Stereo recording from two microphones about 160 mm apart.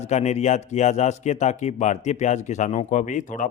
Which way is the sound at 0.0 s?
45° left (ahead or behind).